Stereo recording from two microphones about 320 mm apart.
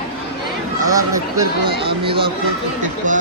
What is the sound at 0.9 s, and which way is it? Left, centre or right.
Speech, centre.